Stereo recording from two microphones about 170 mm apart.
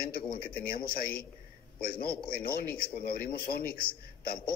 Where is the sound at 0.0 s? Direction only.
60° left (ahead or behind).